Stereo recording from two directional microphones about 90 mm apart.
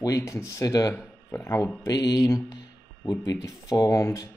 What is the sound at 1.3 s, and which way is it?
Speech, 35° left (ahead or behind).